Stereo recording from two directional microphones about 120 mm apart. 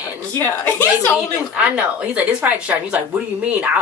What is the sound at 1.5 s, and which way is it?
A woman's voice, 10° right (ahead or behind).